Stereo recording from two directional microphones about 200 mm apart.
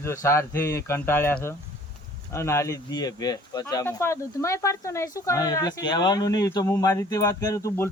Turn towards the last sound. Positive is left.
turn(degrees=15)  # may be behind; listen again after turning